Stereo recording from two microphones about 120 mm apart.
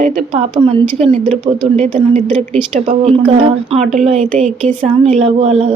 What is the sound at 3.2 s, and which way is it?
A woman's voice, 50° right (ahead or behind).